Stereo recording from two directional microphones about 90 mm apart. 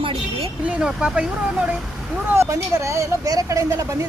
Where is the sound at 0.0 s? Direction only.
90° right.